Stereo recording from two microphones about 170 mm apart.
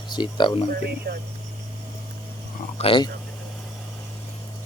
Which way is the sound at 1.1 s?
70° right (ahead or behind).